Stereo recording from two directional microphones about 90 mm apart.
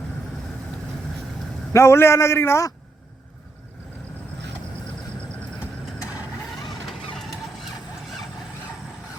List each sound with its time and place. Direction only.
1.7 s a man's voice: 30° left (ahead or behind)
6.8 s vehicle: centre (ahead or behind)